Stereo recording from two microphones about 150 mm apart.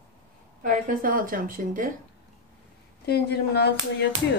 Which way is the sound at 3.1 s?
90° left.